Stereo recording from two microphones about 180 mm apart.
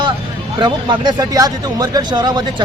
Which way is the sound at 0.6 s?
25° right (ahead or behind).